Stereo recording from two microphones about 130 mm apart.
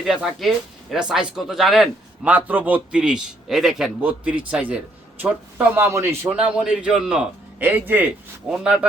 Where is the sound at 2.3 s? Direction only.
15° right (ahead or behind).